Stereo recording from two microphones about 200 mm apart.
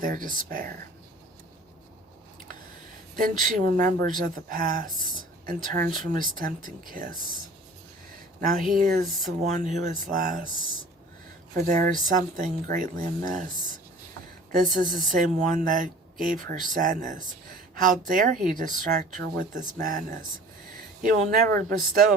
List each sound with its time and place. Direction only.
0.0 s speech: 45° right (ahead or behind)
3.2 s speech: 40° right (ahead or behind)
8.7 s speech: 45° right (ahead or behind)
11.6 s speech: 40° right (ahead or behind)
14.6 s speech: 40° right (ahead or behind)